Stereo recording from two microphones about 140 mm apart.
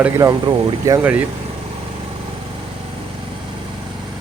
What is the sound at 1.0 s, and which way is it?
Speech, 10° right (ahead or behind).